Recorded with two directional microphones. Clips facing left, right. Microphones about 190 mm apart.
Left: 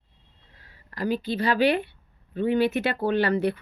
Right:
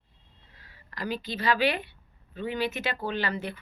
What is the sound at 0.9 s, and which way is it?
A woman's voice, 45° left (ahead or behind).